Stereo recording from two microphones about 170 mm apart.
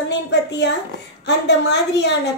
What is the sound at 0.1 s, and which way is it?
A woman's voice, 85° left.